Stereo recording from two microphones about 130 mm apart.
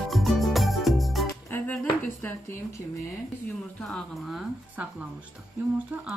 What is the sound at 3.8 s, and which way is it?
Music, 5° left (ahead or behind).